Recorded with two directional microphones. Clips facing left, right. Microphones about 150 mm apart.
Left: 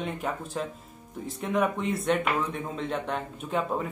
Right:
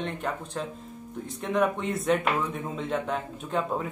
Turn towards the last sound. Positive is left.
turn(degrees=0)  # may be behind; listen again after turning